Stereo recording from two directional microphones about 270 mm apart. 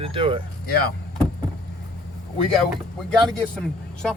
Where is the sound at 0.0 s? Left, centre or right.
Centre.